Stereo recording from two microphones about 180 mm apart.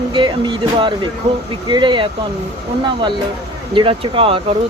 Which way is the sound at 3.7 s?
30° right (ahead or behind).